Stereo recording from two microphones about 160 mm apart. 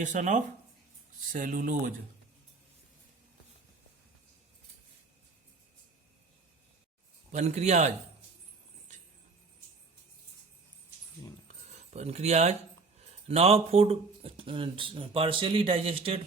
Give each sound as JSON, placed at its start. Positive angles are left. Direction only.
{"t": 0.0, "sound": "speech", "side_deg": -50}
{"t": 7.3, "sound": "speech", "side_deg": -45}
{"t": 11.4, "sound": "keys jangling", "side_deg": -45}
{"t": 13.0, "sound": "speech", "side_deg": -40}